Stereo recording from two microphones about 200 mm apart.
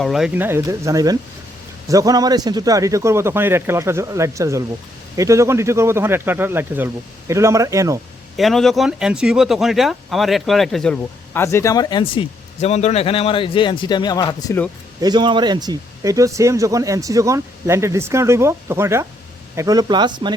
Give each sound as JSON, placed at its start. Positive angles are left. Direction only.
{"t": 0.0, "sound": "speech", "side_deg": 0}
{"t": 8.4, "sound": "speech", "side_deg": 0}
{"t": 11.4, "sound": "speech", "side_deg": 15}
{"t": 15.0, "sound": "speech", "side_deg": -20}